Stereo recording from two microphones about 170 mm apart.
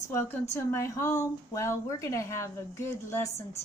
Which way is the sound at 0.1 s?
15° left (ahead or behind).